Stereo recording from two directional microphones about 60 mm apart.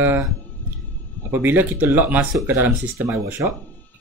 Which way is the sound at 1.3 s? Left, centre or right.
Right.